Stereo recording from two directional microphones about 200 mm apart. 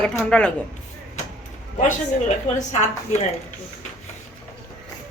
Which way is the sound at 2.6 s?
35° left (ahead or behind).